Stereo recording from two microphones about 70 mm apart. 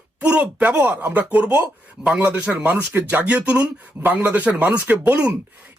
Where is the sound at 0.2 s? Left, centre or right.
Right.